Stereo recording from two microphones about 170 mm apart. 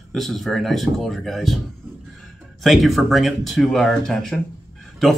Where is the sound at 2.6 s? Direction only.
Centre (ahead or behind).